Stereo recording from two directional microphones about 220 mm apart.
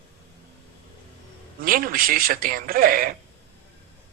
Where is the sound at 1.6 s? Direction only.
40° right (ahead or behind).